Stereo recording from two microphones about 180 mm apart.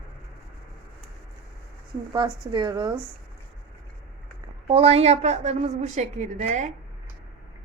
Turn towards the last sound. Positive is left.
turn(degrees=-40)  # may be behind; listen again after turning